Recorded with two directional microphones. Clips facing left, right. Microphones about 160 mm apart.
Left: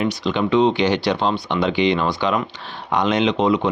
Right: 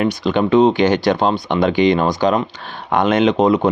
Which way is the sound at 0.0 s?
50° right (ahead or behind).